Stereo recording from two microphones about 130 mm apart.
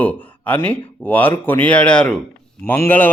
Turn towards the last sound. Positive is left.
turn(degrees=15)  # may be behind; listen again after turning